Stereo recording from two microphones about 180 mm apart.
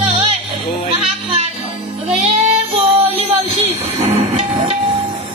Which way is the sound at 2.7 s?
30° right (ahead or behind).